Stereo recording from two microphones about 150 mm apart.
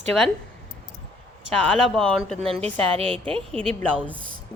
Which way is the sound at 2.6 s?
40° right (ahead or behind).